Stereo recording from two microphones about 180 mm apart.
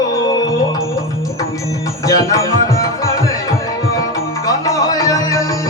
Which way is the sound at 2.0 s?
20° left (ahead or behind).